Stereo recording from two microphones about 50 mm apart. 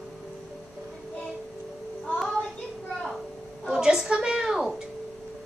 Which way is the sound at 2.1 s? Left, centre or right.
Centre.